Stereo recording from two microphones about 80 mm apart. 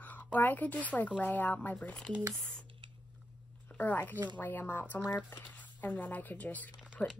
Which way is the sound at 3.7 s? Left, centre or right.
Left.